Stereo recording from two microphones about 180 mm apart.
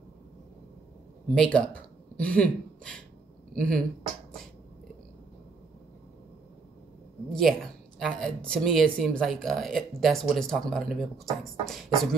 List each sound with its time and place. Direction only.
1.3 s speech: 5° left (ahead or behind)
7.3 s speech: centre (ahead or behind)